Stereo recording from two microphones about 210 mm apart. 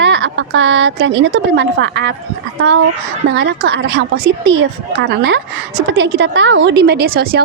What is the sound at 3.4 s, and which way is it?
A woman's voice, 55° right (ahead or behind).